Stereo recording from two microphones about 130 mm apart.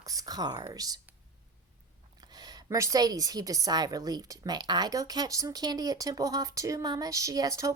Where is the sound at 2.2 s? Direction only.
30° right (ahead or behind).